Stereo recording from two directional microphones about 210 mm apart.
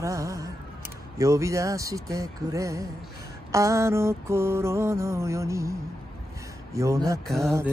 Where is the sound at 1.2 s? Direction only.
15° right (ahead or behind).